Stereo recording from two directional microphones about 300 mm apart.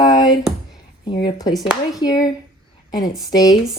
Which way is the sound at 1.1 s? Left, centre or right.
Centre.